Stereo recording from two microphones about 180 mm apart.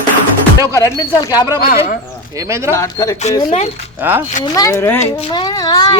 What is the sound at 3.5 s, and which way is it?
Speech, 40° left (ahead or behind).